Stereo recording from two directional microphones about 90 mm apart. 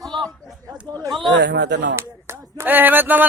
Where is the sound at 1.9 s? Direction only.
30° right (ahead or behind).